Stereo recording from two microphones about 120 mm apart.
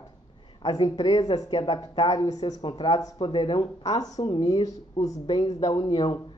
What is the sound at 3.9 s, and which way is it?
Speech, 55° left (ahead or behind).